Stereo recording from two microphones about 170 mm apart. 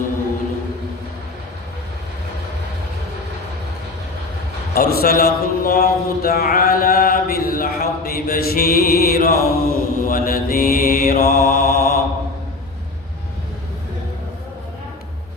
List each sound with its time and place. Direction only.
4.7 s a man's voice: 60° left (ahead or behind)